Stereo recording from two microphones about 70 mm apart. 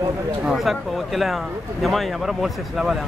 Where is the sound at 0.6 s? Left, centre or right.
Centre.